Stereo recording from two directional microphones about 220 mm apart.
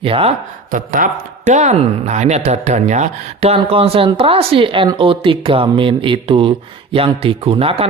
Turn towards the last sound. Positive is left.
turn(degrees=-25)  # may be behind; listen again after turning